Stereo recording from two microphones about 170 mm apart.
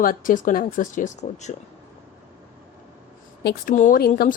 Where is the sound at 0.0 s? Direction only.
55° left (ahead or behind).